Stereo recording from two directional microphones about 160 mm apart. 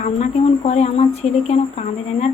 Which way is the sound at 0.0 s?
45° left (ahead or behind).